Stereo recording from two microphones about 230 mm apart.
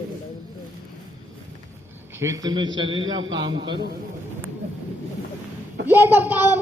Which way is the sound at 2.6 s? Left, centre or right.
Right.